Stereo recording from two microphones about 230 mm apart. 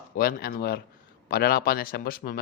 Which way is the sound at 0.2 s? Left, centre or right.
Left.